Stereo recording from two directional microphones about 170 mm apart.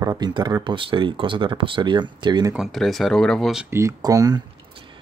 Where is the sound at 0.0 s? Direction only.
20° right (ahead or behind).